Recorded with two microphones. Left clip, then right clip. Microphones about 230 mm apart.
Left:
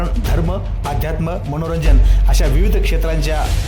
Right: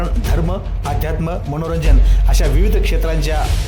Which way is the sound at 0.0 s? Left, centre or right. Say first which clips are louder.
Even; centre.